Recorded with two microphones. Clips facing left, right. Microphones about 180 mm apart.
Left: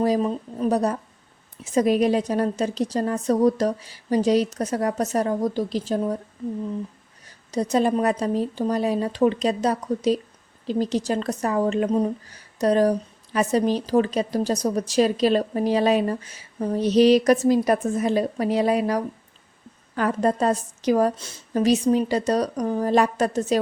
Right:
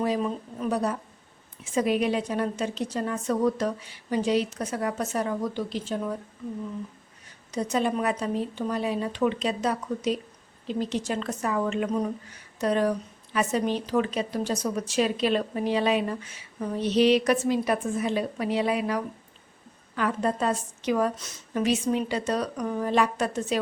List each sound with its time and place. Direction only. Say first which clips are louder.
0.0 s speech: left 5 dB; 35° left (ahead or behind)
7.5 s speech: left 5 dB; 35° left (ahead or behind)